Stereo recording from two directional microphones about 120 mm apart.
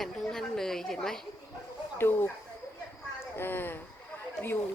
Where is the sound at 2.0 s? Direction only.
20° left (ahead or behind).